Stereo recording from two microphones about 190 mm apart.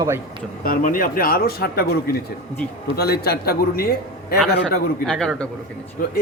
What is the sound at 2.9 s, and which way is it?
A man's voice, 55° left (ahead or behind).